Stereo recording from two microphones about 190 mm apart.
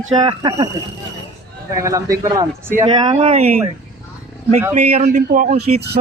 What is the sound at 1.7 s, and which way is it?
A man's voice, 15° right (ahead or behind).